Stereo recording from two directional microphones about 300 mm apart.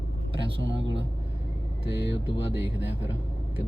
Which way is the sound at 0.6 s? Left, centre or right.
Right.